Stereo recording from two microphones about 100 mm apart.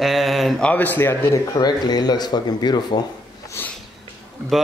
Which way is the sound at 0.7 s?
15° left (ahead or behind).